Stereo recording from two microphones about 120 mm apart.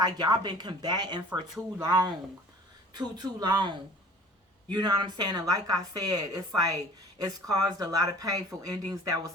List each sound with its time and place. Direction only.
0.0 s speech: 35° right (ahead or behind)